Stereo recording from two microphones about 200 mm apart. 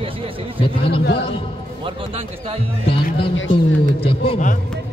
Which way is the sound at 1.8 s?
30° right (ahead or behind).